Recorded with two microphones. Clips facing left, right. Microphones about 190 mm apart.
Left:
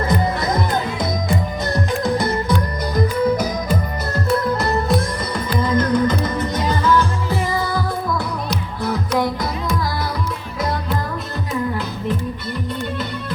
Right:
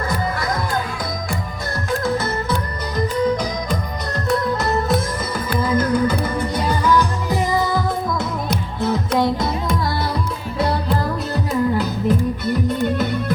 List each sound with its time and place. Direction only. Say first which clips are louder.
0.1 s music: left 3 dB; 20° left (ahead or behind); by 9.5 s 25° right (ahead or behind)
11.8 s music: right 5 dB; 45° right (ahead or behind)